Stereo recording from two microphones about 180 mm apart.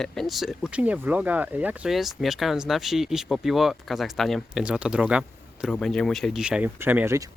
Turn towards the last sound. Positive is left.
turn(degrees=-15)  # may be behind; listen again after turning